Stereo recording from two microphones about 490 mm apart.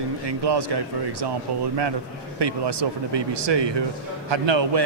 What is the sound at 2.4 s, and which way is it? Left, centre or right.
A man's voice, right.